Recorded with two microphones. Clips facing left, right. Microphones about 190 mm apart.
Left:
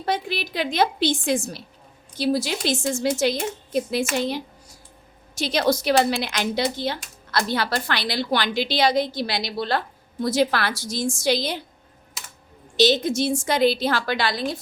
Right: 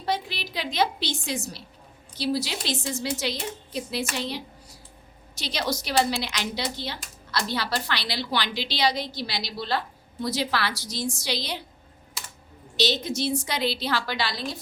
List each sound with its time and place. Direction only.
0.0 s a woman's voice: 55° left (ahead or behind)
12.7 s a woman's voice: 50° left (ahead or behind)